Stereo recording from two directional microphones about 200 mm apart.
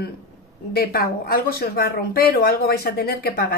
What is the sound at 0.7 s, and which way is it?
Speech, 50° left (ahead or behind).